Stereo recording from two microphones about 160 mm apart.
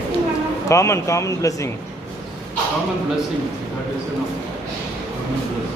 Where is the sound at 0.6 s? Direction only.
20° left (ahead or behind).